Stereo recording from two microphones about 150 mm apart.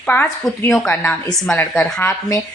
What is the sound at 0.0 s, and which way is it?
A woman's voice, 10° left (ahead or behind).